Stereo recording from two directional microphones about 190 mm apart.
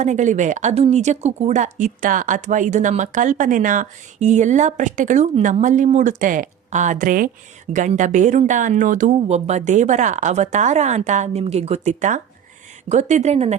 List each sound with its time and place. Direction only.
0.0 s speech: 40° right (ahead or behind)